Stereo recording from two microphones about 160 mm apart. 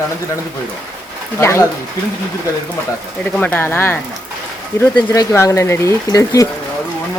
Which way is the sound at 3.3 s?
10° left (ahead or behind).